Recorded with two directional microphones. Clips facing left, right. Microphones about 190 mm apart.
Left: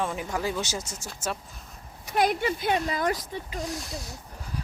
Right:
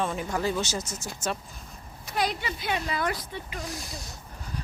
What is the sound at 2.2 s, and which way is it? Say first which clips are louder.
Speech: left 5 dB; 50° left (ahead or behind).